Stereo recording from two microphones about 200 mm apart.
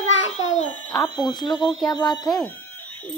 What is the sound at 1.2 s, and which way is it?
Speech, 20° left (ahead or behind).